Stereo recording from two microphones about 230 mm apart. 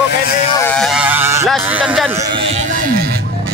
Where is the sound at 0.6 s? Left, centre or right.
Centre.